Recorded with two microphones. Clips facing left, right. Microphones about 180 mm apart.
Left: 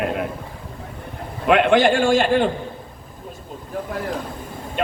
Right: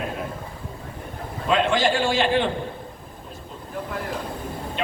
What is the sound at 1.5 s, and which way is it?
A man's voice, 60° left (ahead or behind).